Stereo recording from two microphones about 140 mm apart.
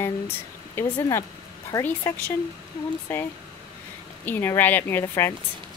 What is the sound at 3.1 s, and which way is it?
A woman's voice, 15° left (ahead or behind).